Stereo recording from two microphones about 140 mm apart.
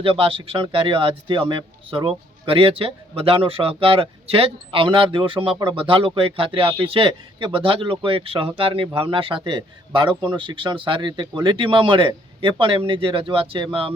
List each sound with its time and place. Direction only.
0.0 s speech: 40° right (ahead or behind)